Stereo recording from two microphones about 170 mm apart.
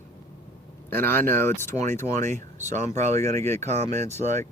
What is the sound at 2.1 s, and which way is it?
Speech, 45° right (ahead or behind).